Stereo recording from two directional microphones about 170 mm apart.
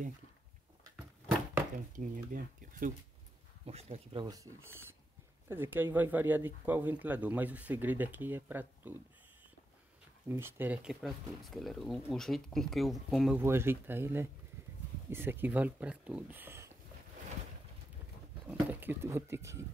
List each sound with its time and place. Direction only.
2.0 s speech: 55° right (ahead or behind)
3.6 s speech: 35° right (ahead or behind); by 9.0 s 10° right (ahead or behind)
10.2 s speech: 15° right (ahead or behind)
13.4 s speech: 15° right (ahead or behind)
18.5 s speech: 10° right (ahead or behind)